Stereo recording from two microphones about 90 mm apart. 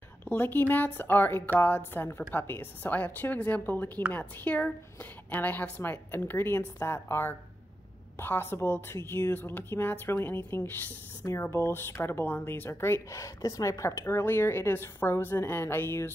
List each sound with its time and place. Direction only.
0.2 s a woman's voice: 20° left (ahead or behind)